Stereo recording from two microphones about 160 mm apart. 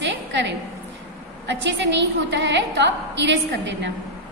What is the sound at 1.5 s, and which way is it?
A woman's voice, 90° right.